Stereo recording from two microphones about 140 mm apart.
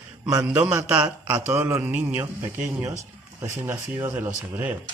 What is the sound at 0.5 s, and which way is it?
A man's voice, 20° right (ahead or behind).